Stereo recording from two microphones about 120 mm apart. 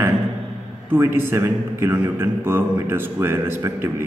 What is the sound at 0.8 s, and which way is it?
A man's voice, 20° right (ahead or behind).